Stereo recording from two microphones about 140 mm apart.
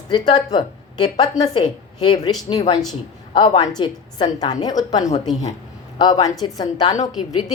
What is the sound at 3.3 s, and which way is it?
A woman's voice, 35° left (ahead or behind).